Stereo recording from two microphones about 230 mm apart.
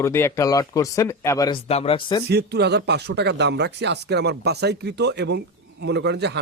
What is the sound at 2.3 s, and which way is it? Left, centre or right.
Speech, right.